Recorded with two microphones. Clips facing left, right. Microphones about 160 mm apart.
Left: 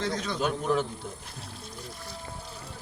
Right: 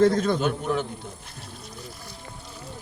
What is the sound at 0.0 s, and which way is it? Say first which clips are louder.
Speech: right 12 dB; 50° right (ahead or behind).